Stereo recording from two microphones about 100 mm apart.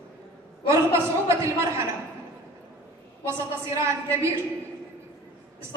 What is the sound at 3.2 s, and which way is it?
A woman's voice, 30° right (ahead or behind).